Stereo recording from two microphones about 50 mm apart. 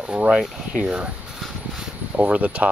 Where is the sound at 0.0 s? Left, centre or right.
Right.